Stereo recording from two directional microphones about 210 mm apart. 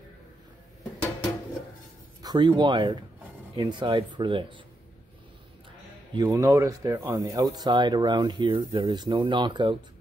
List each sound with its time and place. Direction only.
2.2 s speech: 20° right (ahead or behind)
6.1 s speech: 20° right (ahead or behind)